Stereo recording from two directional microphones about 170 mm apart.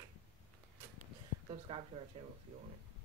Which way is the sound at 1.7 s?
30° right (ahead or behind).